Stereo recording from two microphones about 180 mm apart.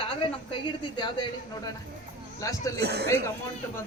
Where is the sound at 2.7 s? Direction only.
65° right (ahead or behind).